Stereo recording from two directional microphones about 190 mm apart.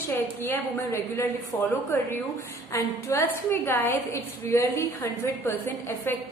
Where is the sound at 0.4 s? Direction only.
10° left (ahead or behind).